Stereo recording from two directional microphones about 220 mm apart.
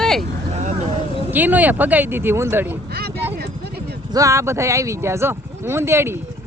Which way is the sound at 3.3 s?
45° right (ahead or behind).